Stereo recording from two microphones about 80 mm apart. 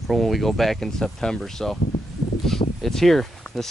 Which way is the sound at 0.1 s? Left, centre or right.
Centre.